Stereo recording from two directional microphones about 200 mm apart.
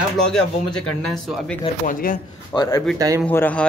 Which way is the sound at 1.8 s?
40° left (ahead or behind).